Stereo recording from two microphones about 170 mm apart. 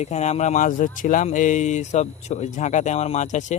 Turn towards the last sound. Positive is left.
turn(degrees=45)  # may be behind; listen again after turning